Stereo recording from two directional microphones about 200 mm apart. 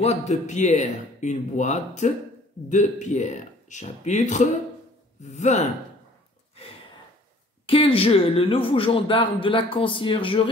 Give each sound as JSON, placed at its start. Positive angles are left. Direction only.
{"t": 0.0, "sound": "speech", "side_deg": 35}
{"t": 7.6, "sound": "speech", "side_deg": 30}